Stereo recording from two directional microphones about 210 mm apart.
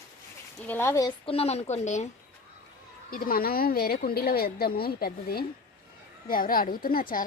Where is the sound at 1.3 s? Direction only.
30° left (ahead or behind).